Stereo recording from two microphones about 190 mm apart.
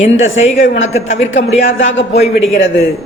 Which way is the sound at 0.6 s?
80° left.